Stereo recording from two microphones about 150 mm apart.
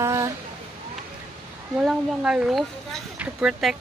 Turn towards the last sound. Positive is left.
turn(degrees=-5)  # may be behind; listen again after turning